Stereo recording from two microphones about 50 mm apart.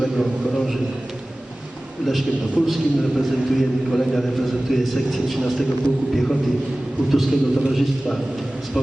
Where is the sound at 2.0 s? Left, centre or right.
Centre.